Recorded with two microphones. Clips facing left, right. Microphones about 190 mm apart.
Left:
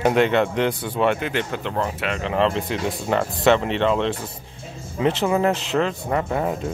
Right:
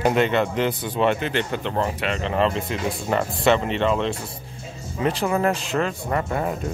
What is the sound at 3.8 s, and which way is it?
Speech, 5° right (ahead or behind).